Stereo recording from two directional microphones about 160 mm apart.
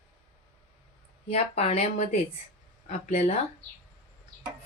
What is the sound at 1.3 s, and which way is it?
A woman's voice, 40° left (ahead or behind).